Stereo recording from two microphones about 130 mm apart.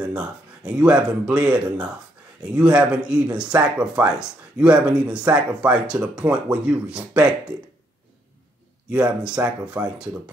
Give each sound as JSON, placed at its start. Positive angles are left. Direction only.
{"t": 0.0, "sound": "speech", "side_deg": -5}
{"t": 8.9, "sound": "speech", "side_deg": -5}